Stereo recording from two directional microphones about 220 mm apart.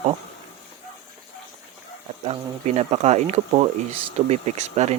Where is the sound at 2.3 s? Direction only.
30° right (ahead or behind).